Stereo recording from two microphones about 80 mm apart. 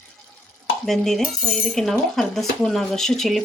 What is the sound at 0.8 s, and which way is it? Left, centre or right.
Speech, centre.